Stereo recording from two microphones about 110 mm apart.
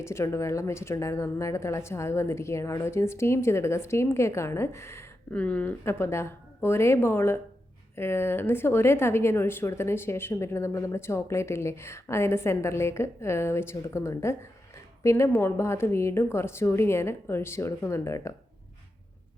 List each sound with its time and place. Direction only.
0.0 s a woman's voice: 25° left (ahead or behind)
5.3 s speech: 10° left (ahead or behind)
5.8 s a woman's voice: 25° left (ahead or behind)